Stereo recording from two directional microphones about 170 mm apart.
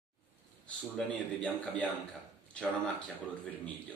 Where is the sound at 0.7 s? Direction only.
5° left (ahead or behind).